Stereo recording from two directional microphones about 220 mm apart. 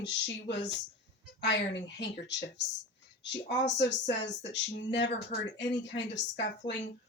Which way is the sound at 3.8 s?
50° left (ahead or behind).